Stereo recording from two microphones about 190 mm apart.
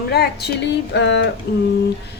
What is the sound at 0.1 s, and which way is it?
Speech, 60° left (ahead or behind).